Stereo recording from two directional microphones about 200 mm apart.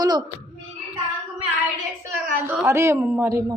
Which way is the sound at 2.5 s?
10° right (ahead or behind).